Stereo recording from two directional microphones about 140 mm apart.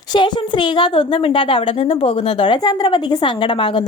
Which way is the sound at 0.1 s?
35° left (ahead or behind).